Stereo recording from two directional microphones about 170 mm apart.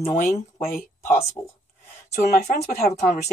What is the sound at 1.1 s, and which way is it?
Speech, 35° left (ahead or behind).